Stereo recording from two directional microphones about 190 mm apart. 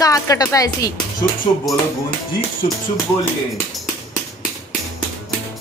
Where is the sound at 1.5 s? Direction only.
30° left (ahead or behind).